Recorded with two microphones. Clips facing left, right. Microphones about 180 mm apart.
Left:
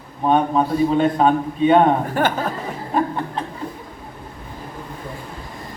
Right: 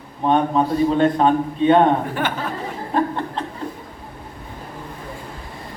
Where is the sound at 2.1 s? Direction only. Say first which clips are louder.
Left 4 dB; 40° left (ahead or behind).